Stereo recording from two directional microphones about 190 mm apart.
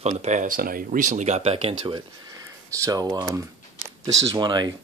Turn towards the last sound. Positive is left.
turn(degrees=-25)  # may be behind; listen again after turning